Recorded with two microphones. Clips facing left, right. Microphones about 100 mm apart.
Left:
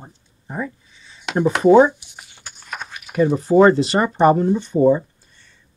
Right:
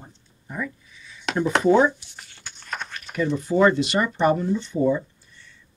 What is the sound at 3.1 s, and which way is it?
Speech, 45° left (ahead or behind).